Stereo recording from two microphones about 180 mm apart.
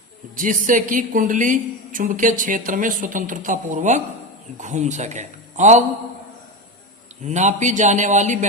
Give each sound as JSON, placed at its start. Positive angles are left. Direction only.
{"t": 0.3, "sound": "a woman's voice", "side_deg": -45}
{"t": 7.2, "sound": "a man's voice", "side_deg": -40}